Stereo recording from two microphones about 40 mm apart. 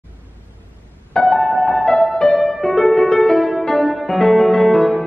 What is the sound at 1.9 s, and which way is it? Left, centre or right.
Music, centre.